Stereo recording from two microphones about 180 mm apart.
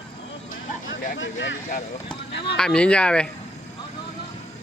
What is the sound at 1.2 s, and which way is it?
Speech, 90° left.